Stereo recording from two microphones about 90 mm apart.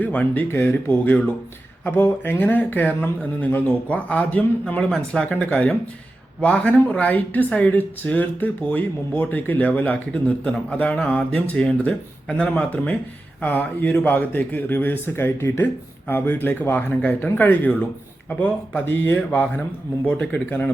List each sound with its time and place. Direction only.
0.0 s speech: 20° left (ahead or behind)